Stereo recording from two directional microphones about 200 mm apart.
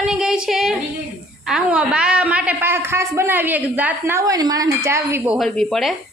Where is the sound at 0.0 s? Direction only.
5° right (ahead or behind).